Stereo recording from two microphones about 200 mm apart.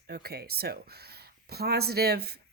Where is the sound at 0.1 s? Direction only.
50° right (ahead or behind).